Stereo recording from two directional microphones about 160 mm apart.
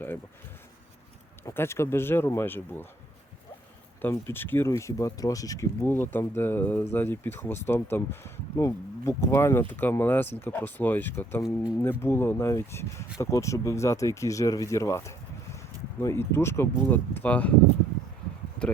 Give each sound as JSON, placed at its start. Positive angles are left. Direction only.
{"t": 1.5, "sound": "speech", "side_deg": 15}
{"t": 4.0, "sound": "speech", "side_deg": 15}